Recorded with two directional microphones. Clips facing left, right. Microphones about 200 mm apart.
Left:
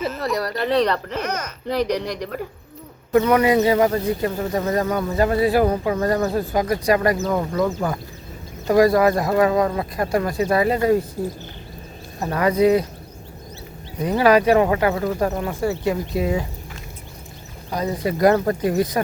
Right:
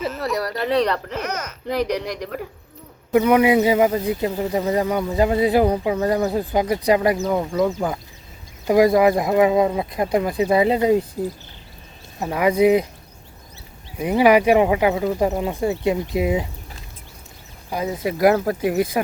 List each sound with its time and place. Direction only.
0.0 s speech: centre (ahead or behind); by 11.0 s 15° right (ahead or behind)
12.2 s speech: 10° right (ahead or behind)
14.0 s speech: 15° right (ahead or behind)
17.7 s speech: 5° right (ahead or behind)